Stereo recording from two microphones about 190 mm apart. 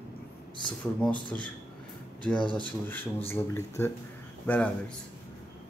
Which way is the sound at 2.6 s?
10° left (ahead or behind).